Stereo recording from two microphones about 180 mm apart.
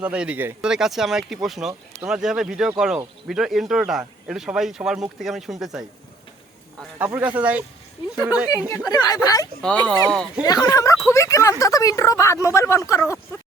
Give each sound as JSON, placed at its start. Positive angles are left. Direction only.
{"t": 0.0, "sound": "speech", "side_deg": -5}
{"t": 7.0, "sound": "speech", "side_deg": -10}
{"t": 8.9, "sound": "speech", "side_deg": 20}
{"t": 9.6, "sound": "speech", "side_deg": 5}
{"t": 10.4, "sound": "speech", "side_deg": 20}